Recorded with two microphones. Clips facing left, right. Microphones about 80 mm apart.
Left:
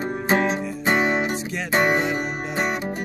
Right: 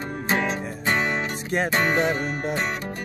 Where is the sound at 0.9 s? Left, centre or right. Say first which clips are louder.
Left 4 dB; centre.